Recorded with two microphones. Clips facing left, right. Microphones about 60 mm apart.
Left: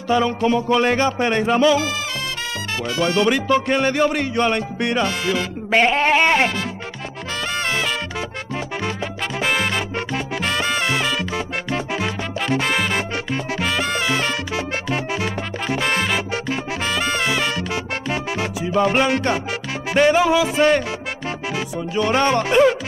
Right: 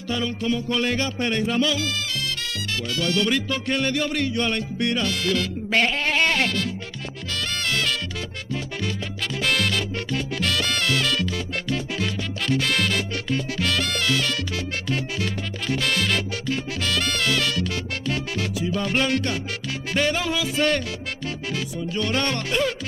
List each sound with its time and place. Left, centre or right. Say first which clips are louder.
0.1 s music: left 8 dB; left
3.0 s music: left 5 dB; left
9.4 s salsa music: left 3 dB; left
19.9 s music: left 9 dB; centre
21.9 s music: left 8 dB; centre